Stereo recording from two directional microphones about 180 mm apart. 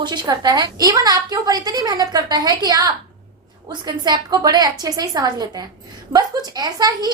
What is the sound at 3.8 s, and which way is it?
A woman's voice, 25° right (ahead or behind).